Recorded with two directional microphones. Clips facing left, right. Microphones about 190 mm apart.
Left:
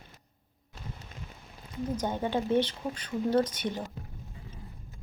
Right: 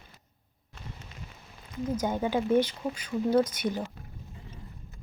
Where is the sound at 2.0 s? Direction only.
10° right (ahead or behind).